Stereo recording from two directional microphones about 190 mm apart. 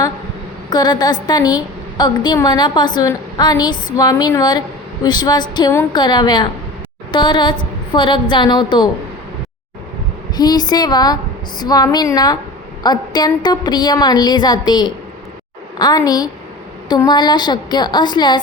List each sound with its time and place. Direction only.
0.7 s a woman's voice: 20° left (ahead or behind)
10.3 s a woman's voice: 20° left (ahead or behind)